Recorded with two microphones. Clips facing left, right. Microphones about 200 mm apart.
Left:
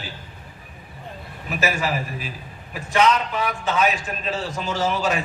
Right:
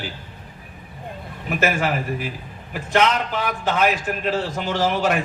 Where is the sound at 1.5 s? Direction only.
60° right (ahead or behind).